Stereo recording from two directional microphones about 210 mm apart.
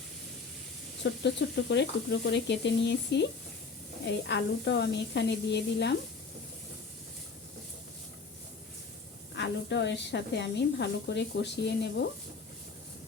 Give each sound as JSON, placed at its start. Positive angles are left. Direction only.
{"t": 1.0, "sound": "speech", "side_deg": 55}
{"t": 9.3, "sound": "speech", "side_deg": 55}